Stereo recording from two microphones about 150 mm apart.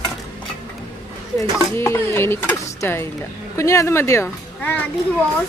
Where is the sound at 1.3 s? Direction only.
15° left (ahead or behind).